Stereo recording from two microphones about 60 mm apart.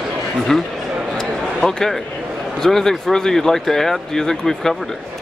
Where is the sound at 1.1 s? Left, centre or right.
Centre.